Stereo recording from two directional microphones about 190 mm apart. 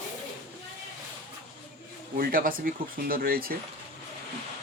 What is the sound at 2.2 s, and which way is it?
Speech, 50° right (ahead or behind).